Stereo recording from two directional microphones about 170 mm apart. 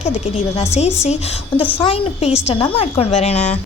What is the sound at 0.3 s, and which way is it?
A woman's voice, 35° left (ahead or behind).